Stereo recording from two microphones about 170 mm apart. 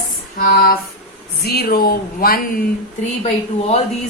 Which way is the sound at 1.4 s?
65° left (ahead or behind).